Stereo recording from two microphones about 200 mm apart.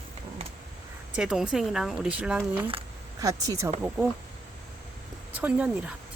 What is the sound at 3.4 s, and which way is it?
Speech, 15° right (ahead or behind).